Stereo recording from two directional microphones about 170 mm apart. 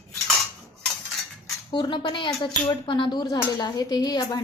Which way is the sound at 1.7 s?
30° left (ahead or behind).